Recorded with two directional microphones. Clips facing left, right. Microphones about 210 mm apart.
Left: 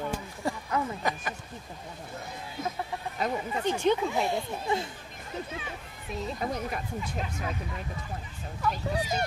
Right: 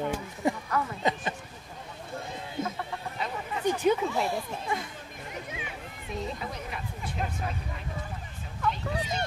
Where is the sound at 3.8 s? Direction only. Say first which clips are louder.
Even; 5° right (ahead or behind).